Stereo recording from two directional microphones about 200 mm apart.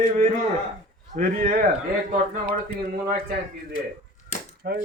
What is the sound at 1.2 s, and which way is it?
Speech, 45° right (ahead or behind).